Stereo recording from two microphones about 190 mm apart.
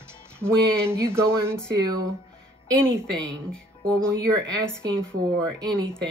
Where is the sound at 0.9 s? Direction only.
15° right (ahead or behind).